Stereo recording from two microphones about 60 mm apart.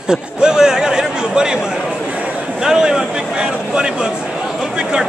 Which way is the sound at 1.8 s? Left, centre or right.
Right.